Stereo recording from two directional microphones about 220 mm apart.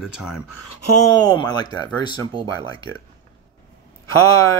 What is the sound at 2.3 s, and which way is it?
Speech, 25° right (ahead or behind).